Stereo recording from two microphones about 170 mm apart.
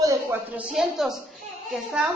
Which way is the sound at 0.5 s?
5° right (ahead or behind).